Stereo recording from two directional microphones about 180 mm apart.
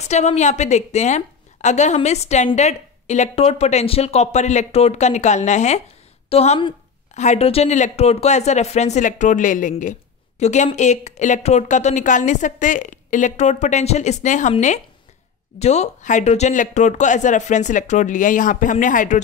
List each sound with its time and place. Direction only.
0.1 s a woman's voice: 40° left (ahead or behind)